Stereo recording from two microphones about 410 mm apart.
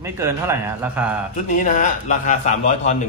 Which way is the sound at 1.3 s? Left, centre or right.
Centre.